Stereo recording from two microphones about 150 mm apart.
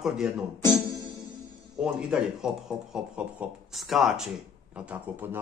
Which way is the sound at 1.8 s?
5° right (ahead or behind).